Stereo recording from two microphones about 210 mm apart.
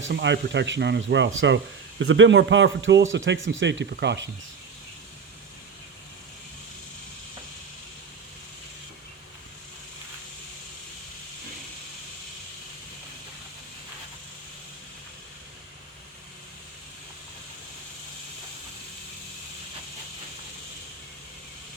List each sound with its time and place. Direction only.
0.0 s speech: 55° right (ahead or behind)